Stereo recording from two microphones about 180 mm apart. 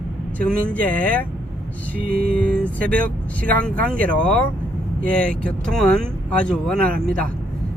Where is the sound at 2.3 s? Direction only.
5° left (ahead or behind).